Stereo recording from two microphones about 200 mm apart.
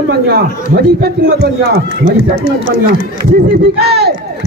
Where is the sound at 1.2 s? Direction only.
55° right (ahead or behind).